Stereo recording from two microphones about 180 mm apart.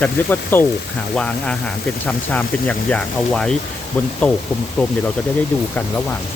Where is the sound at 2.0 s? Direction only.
10° left (ahead or behind).